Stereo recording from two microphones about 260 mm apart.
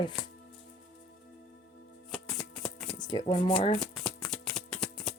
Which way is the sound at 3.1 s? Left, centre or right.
Centre.